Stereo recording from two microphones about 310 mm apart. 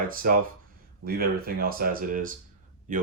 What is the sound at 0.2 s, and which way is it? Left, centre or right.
Speech, right.